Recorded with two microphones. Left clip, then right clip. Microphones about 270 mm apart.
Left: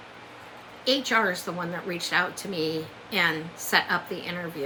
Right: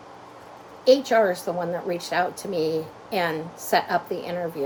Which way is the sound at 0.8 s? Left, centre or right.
Centre.